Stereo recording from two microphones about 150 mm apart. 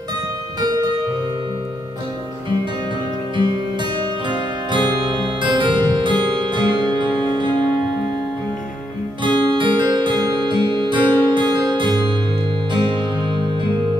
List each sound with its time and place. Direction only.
4.0 s music: 30° right (ahead or behind)
9.2 s music: 30° right (ahead or behind)